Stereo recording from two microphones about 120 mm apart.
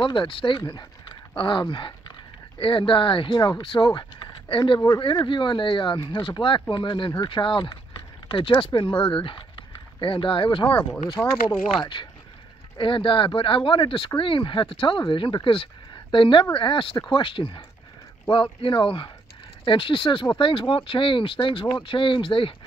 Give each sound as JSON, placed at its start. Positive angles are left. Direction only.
{"t": 0.0, "sound": "speech", "side_deg": 45}
{"t": 4.7, "sound": "speech", "side_deg": 30}
{"t": 11.2, "sound": "speech", "side_deg": 15}
{"t": 11.8, "sound": "speech", "side_deg": 40}